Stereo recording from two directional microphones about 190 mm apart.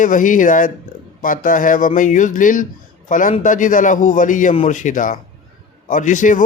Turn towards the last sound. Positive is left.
turn(degrees=40)  # may be behind; listen again after turning